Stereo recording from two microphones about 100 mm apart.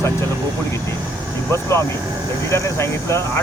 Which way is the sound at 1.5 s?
25° left (ahead or behind).